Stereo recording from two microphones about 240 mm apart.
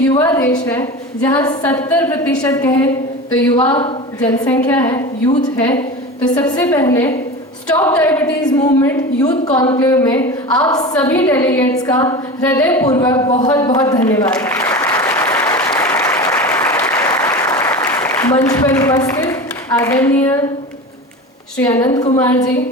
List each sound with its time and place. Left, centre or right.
0.1 s a woman's voice: centre
14.1 s applause: centre
19.1 s a sound: centre
21.6 s a woman's voice: centre